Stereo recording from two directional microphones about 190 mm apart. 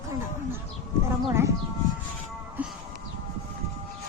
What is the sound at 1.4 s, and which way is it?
Speech, 15° right (ahead or behind).